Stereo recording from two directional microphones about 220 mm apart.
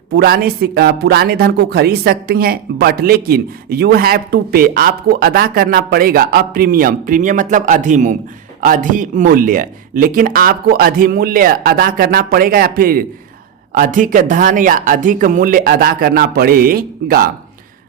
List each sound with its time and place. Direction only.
0.1 s speech: 45° right (ahead or behind)